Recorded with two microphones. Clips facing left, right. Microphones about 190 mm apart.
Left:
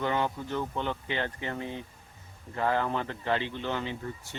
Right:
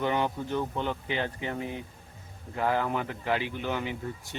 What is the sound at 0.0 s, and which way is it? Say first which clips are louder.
Speech: right 1 dB; 15° right (ahead or behind).